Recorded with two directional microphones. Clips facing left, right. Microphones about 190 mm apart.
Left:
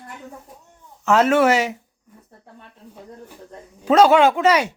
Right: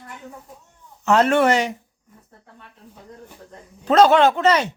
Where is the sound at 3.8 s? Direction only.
10° left (ahead or behind).